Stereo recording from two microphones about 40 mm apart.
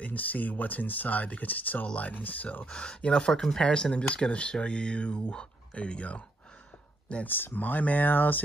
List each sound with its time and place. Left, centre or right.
0.0 s speech: left
2.6 s speech: left
3.3 s speech: centre
3.6 s speech: left
5.8 s speech: left
7.2 s speech: left